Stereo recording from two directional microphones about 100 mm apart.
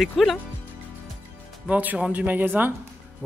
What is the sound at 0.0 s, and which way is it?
Speech, centre (ahead or behind).